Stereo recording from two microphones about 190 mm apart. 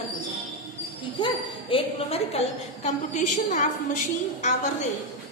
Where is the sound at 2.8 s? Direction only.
40° left (ahead or behind).